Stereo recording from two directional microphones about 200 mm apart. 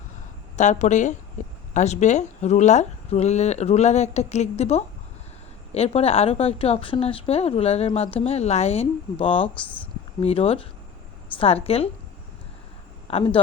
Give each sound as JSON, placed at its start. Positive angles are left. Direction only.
{"t": 0.5, "sound": "a woman's voice", "side_deg": 35}
{"t": 13.1, "sound": "speech", "side_deg": 30}